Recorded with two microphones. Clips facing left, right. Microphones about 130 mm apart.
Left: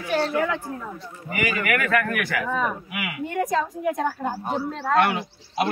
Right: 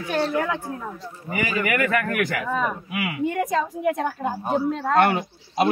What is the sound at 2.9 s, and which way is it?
Speech, 30° right (ahead or behind).